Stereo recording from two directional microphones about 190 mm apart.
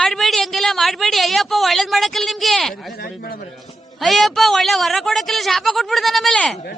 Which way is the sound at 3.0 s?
55° left (ahead or behind).